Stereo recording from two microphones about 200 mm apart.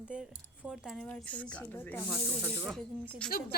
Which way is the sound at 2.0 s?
5° right (ahead or behind).